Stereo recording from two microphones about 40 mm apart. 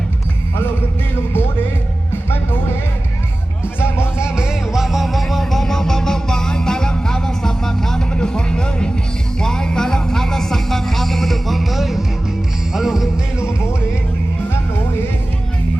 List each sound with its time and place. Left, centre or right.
3.8 s music: left
4.2 s music: centre
5.0 s music: centre